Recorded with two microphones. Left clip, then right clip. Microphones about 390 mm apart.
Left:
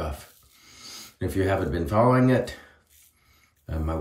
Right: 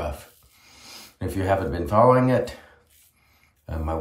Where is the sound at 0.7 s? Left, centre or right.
Right.